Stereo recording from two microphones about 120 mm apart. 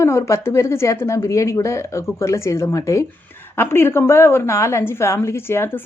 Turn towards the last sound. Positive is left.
turn(degrees=20)  # may be behind; listen again after turning